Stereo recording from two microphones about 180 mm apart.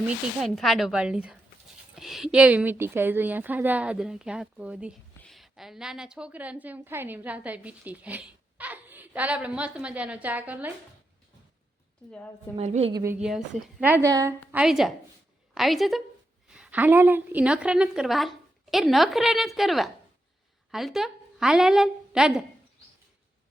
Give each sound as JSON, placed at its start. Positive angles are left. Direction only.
{"t": 0.4, "sound": "a woman's voice", "side_deg": 0}
{"t": 12.5, "sound": "a woman's voice", "side_deg": -35}
{"t": 12.9, "sound": "a woman's voice", "side_deg": -20}
{"t": 13.2, "sound": "a woman's voice", "side_deg": 0}
{"t": 14.5, "sound": "a woman's voice", "side_deg": -5}